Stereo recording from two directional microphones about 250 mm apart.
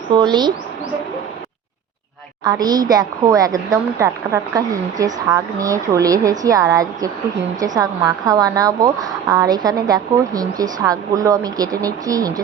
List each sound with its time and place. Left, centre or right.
0.1 s a woman's voice: centre
2.4 s a woman's voice: centre